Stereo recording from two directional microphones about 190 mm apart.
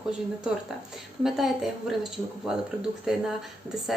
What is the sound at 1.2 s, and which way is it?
Speech, centre (ahead or behind).